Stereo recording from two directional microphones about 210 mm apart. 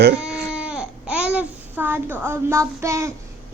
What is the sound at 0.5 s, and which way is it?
Babbling, 5° right (ahead or behind).